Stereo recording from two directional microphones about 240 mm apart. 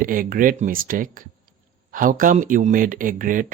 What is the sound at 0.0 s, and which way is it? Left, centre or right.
Speech, right.